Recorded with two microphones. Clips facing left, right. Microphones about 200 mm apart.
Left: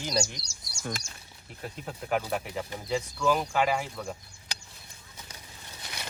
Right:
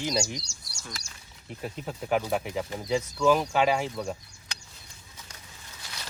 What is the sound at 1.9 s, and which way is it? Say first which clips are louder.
Speech: right 3 dB; centre (ahead or behind).